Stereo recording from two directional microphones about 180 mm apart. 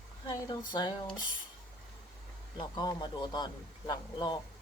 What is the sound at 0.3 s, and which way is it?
Speech, 20° left (ahead or behind).